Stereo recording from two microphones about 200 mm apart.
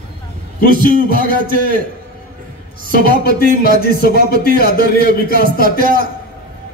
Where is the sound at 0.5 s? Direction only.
50° left (ahead or behind).